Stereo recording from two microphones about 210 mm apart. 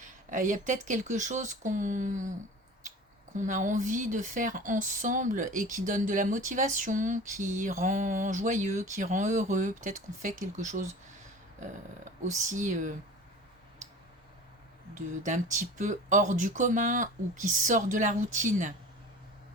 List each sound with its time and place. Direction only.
0.0 s speech: 35° right (ahead or behind)
3.3 s speech: 35° right (ahead or behind)
14.9 s speech: 35° right (ahead or behind)